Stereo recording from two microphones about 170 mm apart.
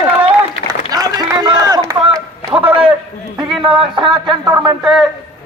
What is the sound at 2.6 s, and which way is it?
Speech, 35° right (ahead or behind).